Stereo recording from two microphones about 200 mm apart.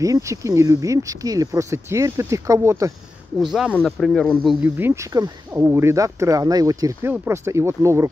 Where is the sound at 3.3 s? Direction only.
Centre (ahead or behind).